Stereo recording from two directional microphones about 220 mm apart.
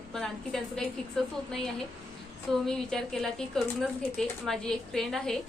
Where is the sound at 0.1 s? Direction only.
Centre (ahead or behind).